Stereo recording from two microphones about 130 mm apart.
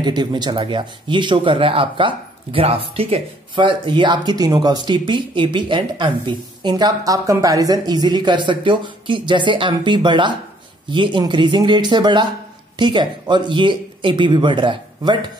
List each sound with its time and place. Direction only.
0.0 s speech: 35° right (ahead or behind)